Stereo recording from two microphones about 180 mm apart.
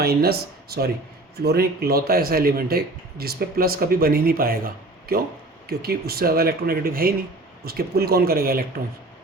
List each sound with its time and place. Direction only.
0.0 s a man's voice: 60° right (ahead or behind)